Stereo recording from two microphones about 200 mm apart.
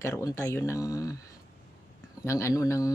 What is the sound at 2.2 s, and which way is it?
Speech, 15° left (ahead or behind).